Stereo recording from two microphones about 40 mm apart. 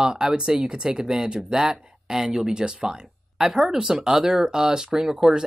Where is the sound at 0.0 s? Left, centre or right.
Centre.